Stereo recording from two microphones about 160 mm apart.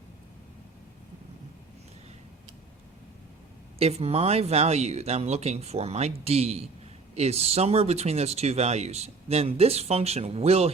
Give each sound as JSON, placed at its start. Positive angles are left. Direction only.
{"t": 3.8, "sound": "speech", "side_deg": -40}